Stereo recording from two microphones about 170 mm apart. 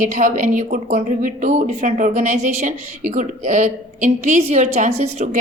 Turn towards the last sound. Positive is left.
turn(degrees=-45)  # may be behind; listen again after turning